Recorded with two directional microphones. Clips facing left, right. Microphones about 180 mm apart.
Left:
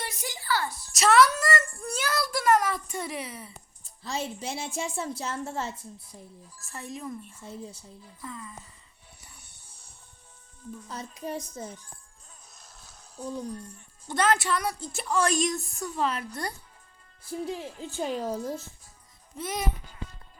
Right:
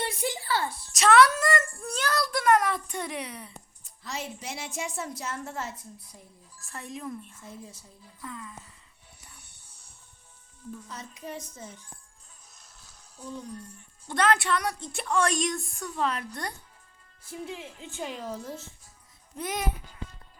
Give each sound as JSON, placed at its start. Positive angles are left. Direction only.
{"t": 0.0, "sound": "a sound", "side_deg": -30}
{"t": 0.9, "sound": "child singing", "side_deg": 0}
{"t": 3.8, "sound": "a woman's voice", "side_deg": 30}
{"t": 6.6, "sound": "a woman's voice", "side_deg": 0}
{"t": 7.4, "sound": "a woman's voice", "side_deg": 30}
{"t": 7.8, "sound": "a woman's voice", "side_deg": 0}
{"t": 10.8, "sound": "speech", "side_deg": 35}
{"t": 13.1, "sound": "speech", "side_deg": 40}
{"t": 14.1, "sound": "a woman's voice", "side_deg": 0}
{"t": 17.2, "sound": "speech", "side_deg": 35}
{"t": 19.4, "sound": "a woman's voice", "side_deg": 0}